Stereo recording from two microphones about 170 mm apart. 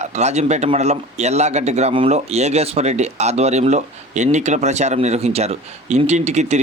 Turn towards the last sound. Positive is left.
turn(degrees=-40)  # may be behind; listen again after turning